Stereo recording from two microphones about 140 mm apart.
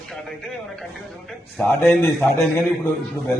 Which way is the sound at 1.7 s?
15° left (ahead or behind).